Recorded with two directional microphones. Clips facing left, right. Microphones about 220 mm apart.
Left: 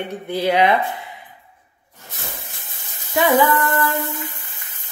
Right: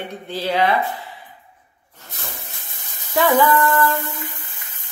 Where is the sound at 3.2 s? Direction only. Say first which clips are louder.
Even; 15° left (ahead or behind).